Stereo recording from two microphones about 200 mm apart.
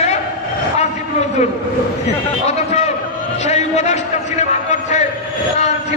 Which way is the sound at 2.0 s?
35° left (ahead or behind).